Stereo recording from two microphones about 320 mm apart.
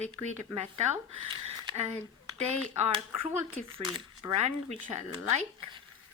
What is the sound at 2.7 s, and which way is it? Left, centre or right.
Speech, right.